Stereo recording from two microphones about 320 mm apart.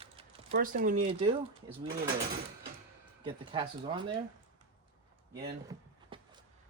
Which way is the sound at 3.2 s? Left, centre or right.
Centre.